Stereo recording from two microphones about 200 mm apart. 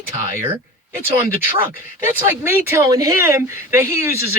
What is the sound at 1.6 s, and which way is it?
Speech, 10° right (ahead or behind).